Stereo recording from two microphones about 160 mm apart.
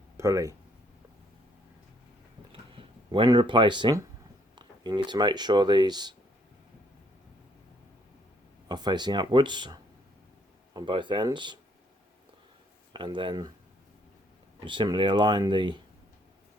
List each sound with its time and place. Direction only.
0.2 s speech: 20° right (ahead or behind)
2.5 s a sound: 35° right (ahead or behind)
4.5 s speech: 25° right (ahead or behind)
8.6 s speech: 25° right (ahead or behind)
12.9 s speech: 30° right (ahead or behind)
14.6 s speech: 30° right (ahead or behind)